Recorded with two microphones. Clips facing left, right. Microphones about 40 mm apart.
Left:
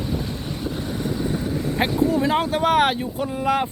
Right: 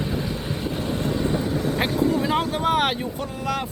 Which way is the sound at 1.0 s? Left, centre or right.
Right.